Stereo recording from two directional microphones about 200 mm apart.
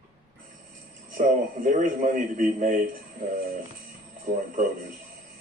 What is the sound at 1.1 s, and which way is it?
A man's voice, 40° right (ahead or behind).